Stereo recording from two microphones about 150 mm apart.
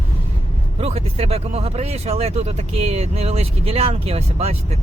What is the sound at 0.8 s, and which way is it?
Speech, 40° right (ahead or behind).